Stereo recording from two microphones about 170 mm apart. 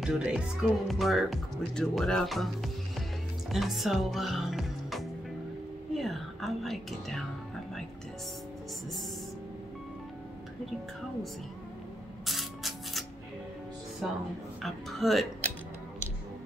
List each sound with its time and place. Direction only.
0.0 s speech: 5° right (ahead or behind)
5.9 s whispering: centre (ahead or behind)
12.3 s spray: centre (ahead or behind)
14.0 s speech: centre (ahead or behind)